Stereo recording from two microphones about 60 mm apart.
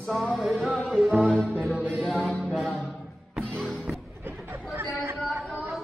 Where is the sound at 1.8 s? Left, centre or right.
Centre.